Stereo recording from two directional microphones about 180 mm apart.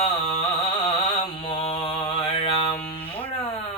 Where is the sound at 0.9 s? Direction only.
30° left (ahead or behind).